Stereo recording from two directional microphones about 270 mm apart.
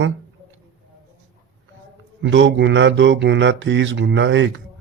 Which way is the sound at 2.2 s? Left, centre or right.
Right.